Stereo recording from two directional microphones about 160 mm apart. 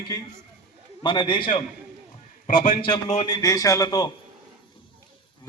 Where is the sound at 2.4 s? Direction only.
55° left (ahead or behind).